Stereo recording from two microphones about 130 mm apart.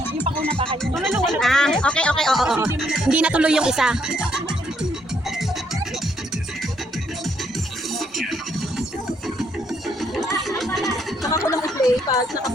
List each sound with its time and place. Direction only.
0.3 s music: 45° right (ahead or behind)
0.9 s speech: centre (ahead or behind)
7.9 s music: centre (ahead or behind)
10.0 s a sound: centre (ahead or behind)
11.2 s speech: 25° left (ahead or behind)